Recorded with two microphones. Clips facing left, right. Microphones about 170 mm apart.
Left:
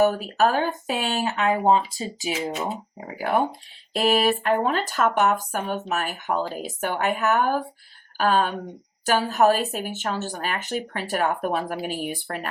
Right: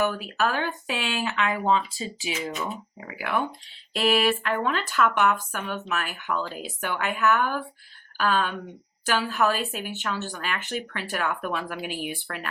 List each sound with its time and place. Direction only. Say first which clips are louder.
0.0 s a woman's voice: left 6 dB; 40° left (ahead or behind)